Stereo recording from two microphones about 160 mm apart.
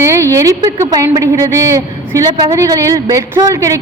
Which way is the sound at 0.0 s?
20° right (ahead or behind).